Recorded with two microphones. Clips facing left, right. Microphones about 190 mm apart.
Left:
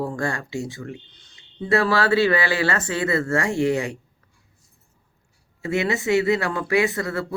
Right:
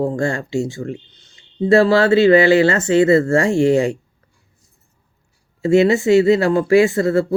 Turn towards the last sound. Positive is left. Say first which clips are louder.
# right 9 dB
turn(degrees=-25)  # may be behind; listen again after turning